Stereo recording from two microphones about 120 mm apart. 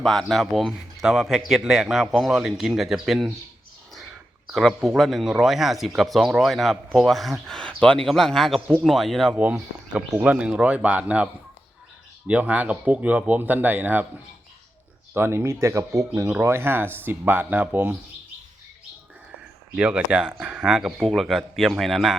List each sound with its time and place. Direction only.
0.0 s speech: centre (ahead or behind)
4.5 s speech: centre (ahead or behind)
9.3 s speech: 10° right (ahead or behind)
12.3 s speech: 10° right (ahead or behind)
15.1 s speech: 20° right (ahead or behind)
19.7 s speech: 10° right (ahead or behind)